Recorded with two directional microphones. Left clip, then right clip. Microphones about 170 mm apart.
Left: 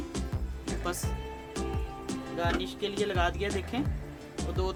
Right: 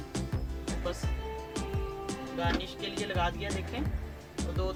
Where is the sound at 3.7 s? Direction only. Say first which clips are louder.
Left 4 dB; 55° left (ahead or behind).